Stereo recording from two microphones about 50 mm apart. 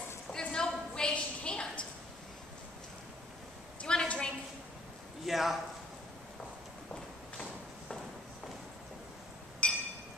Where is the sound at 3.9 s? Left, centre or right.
Centre.